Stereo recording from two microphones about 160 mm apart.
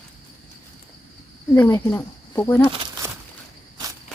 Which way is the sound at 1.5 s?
15° left (ahead or behind).